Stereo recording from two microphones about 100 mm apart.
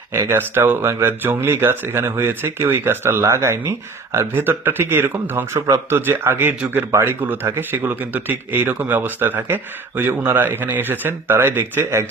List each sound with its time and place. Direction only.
0.1 s speech: 25° right (ahead or behind)